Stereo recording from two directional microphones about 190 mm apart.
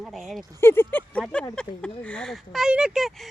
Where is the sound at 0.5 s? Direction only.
10° left (ahead or behind).